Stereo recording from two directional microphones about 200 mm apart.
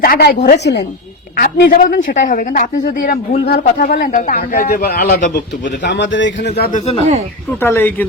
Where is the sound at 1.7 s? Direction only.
45° left (ahead or behind).